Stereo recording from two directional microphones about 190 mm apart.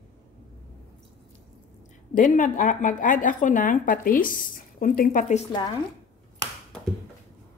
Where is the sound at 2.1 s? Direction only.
45° left (ahead or behind).